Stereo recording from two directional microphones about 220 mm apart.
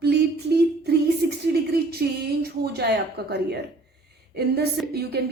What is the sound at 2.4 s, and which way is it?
Speech, 45° right (ahead or behind).